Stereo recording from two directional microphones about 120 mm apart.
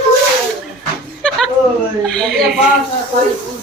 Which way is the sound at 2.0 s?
5° left (ahead or behind).